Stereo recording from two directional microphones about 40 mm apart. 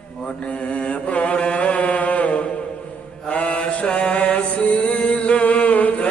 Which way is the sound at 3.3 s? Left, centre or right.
Left.